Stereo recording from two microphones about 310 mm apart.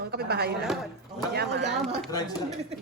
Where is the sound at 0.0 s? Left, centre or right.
Right.